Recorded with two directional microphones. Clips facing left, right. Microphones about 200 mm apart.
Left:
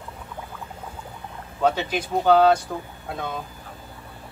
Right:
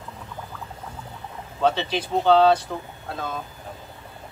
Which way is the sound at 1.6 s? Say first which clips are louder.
Even; 10° left (ahead or behind).